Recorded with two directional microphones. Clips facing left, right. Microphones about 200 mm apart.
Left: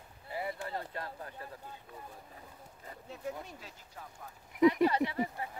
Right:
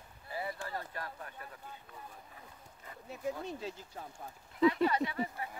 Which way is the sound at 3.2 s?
25° right (ahead or behind).